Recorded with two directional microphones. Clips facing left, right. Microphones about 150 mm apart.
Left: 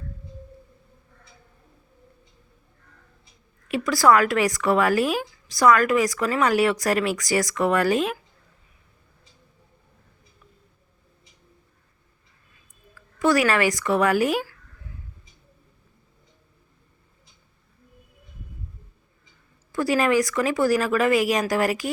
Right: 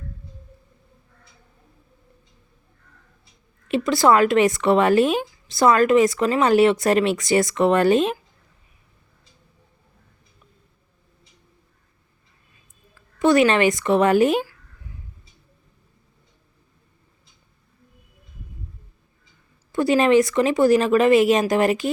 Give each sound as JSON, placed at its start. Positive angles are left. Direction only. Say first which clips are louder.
{"t": 3.7, "sound": "speech", "louder": "right 1 dB", "side_deg": -25}
{"t": 12.9, "sound": "speech", "louder": "right 3 dB", "side_deg": -20}
{"t": 19.7, "sound": "speech", "louder": "right 4 dB", "side_deg": -25}